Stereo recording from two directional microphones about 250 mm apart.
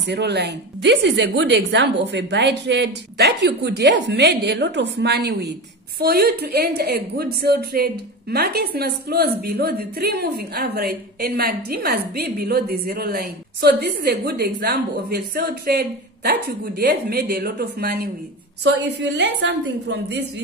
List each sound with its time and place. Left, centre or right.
0.0 s a woman's voice: right